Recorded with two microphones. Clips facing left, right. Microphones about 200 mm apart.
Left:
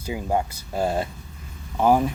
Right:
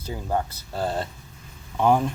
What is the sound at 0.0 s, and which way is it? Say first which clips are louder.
Speech: left 2 dB; 10° left (ahead or behind).